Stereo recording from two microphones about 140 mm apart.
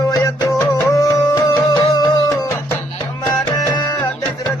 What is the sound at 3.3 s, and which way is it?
Tabla, 25° left (ahead or behind).